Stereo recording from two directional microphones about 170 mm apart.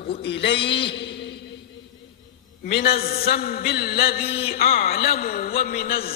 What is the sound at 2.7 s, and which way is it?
A man's voice, 65° left (ahead or behind).